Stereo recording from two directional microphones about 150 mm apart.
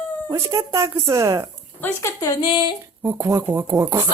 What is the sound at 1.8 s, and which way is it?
Speech, 15° left (ahead or behind).